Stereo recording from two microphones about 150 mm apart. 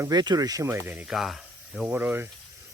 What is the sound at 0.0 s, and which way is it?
Speech, 25° right (ahead or behind).